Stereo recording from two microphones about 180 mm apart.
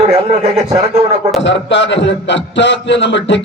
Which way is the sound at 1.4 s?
80° left.